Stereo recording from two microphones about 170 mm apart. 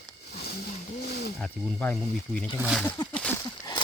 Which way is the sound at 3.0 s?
5° left (ahead or behind).